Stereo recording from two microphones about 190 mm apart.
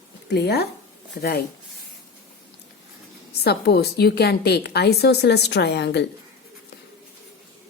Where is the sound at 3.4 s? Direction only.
55° left (ahead or behind).